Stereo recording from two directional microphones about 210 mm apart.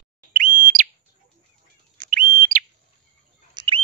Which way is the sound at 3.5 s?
20° right (ahead or behind).